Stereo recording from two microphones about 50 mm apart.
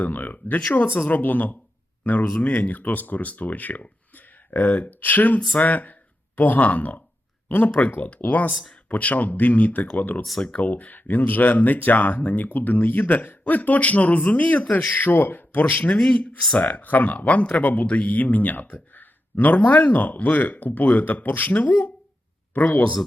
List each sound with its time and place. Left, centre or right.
0.0 s speech: left
7.4 s a sound: left
7.9 s speech: left
8.1 s speech: left
10.2 s speech: centre
10.5 s speech: left
13.0 s a man's voice: left
13.4 s speech: left
16.4 s speech: centre
16.6 s speech: left